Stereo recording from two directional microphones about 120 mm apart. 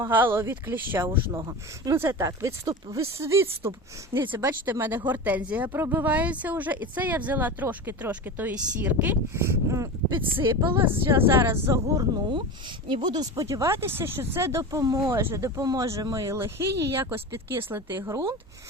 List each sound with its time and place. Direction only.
0.0 s speech: 15° right (ahead or behind)
1.4 s a woman's voice: 30° right (ahead or behind)
10.1 s a woman's voice: 45° right (ahead or behind)
10.8 s speech: 20° right (ahead or behind)
12.1 s a woman's voice: 45° right (ahead or behind); by 18.3 s 20° right (ahead or behind)